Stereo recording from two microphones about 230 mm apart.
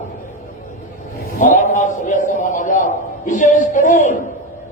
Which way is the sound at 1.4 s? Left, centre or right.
Left.